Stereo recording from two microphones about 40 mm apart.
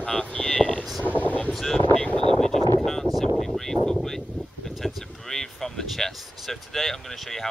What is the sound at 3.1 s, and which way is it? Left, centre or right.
Speech, centre.